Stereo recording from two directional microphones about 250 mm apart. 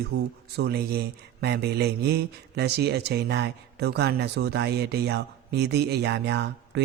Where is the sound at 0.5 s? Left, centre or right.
Right.